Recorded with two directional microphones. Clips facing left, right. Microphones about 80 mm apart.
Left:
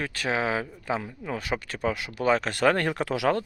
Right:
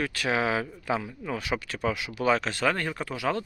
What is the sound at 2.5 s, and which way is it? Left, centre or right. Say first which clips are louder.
Speech: left 4 dB; left.